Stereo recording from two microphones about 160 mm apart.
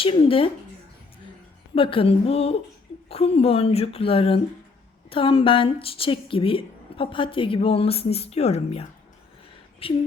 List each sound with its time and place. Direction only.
0.0 s a woman's voice: 35° left (ahead or behind)
1.7 s a woman's voice: 35° left (ahead or behind)